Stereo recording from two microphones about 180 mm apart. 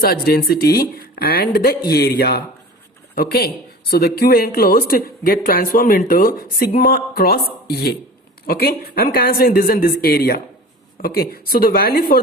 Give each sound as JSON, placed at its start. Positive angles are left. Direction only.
{"t": 0.0, "sound": "speech", "side_deg": 60}